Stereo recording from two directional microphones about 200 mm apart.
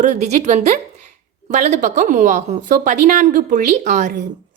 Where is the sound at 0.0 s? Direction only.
35° right (ahead or behind).